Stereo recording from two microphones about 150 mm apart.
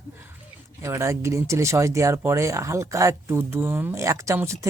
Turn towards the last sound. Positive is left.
turn(degrees=-20)  # may be behind; listen again after turning